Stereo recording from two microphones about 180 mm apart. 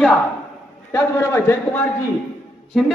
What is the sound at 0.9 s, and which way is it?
Speech, 15° left (ahead or behind).